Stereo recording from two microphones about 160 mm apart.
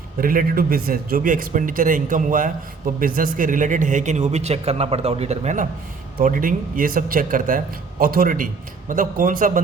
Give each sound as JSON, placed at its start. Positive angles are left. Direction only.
{"t": 0.2, "sound": "a man's voice", "side_deg": -60}
{"t": 6.1, "sound": "a man's voice", "side_deg": -60}